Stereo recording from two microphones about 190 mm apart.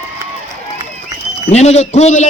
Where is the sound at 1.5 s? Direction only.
35° left (ahead or behind).